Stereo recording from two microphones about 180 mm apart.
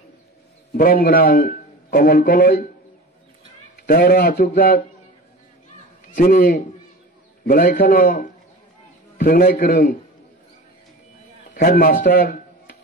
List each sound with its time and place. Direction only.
0.7 s a man's voice: 50° left (ahead or behind)
3.8 s a man's voice: 55° left (ahead or behind)
6.1 s a man's voice: 50° left (ahead or behind)
11.5 s speech: 55° left (ahead or behind)